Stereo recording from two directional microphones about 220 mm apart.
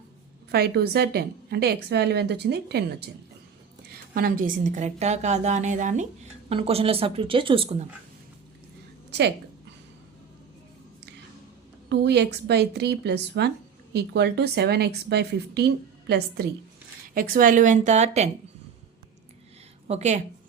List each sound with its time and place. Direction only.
0.5 s a woman's voice: 45° right (ahead or behind); by 7.9 s 25° right (ahead or behind)
9.0 s a sound: 50° right (ahead or behind)
11.9 s a woman's voice: 50° right (ahead or behind); by 18.3 s 30° right (ahead or behind)
19.9 s a woman's voice: 30° right (ahead or behind)